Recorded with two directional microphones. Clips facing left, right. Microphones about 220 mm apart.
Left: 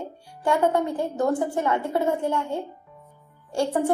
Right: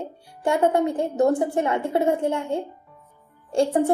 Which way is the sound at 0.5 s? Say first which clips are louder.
Right 2 dB; 20° right (ahead or behind).